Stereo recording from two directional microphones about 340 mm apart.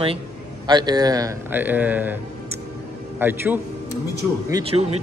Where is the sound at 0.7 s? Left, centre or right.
Centre.